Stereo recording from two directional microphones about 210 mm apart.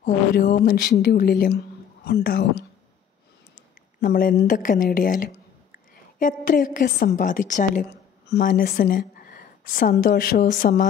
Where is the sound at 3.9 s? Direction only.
45° left (ahead or behind).